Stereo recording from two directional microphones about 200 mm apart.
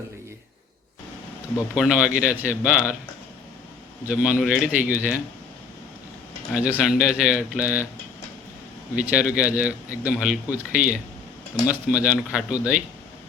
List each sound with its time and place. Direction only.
1.7 s a man's voice: 5° right (ahead or behind)
4.0 s a man's voice: 5° right (ahead or behind)
6.5 s a man's voice: 5° right (ahead or behind)
9.0 s a man's voice: 5° right (ahead or behind)